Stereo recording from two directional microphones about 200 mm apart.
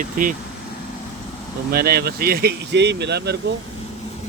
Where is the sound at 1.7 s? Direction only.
50° right (ahead or behind).